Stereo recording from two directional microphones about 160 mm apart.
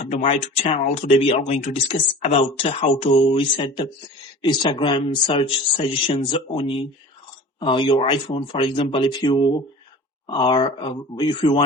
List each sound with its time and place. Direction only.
0.1 s speech: 45° left (ahead or behind)